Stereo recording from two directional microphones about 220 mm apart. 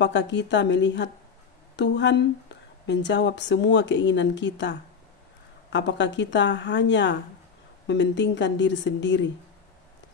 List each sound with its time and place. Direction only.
0.0 s a woman's voice: 55° left (ahead or behind)